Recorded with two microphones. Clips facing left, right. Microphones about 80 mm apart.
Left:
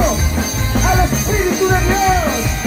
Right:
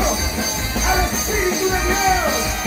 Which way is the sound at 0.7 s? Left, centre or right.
Left.